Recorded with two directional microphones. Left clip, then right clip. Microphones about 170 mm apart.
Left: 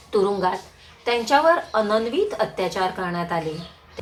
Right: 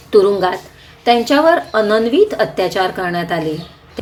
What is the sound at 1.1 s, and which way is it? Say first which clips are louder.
A woman's voice: right 6 dB; 40° right (ahead or behind).